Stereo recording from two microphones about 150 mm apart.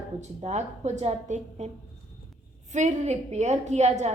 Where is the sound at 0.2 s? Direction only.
50° right (ahead or behind).